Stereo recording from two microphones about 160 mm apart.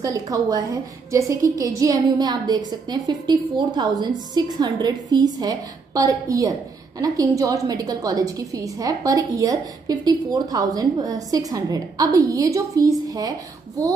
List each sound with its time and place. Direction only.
0.0 s a woman's voice: 20° right (ahead or behind)